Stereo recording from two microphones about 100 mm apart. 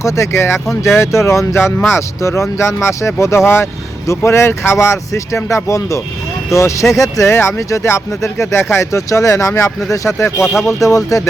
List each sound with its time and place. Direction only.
0.0 s speech: 25° left (ahead or behind)
10.3 s speech: centre (ahead or behind)
10.8 s speech: 35° left (ahead or behind)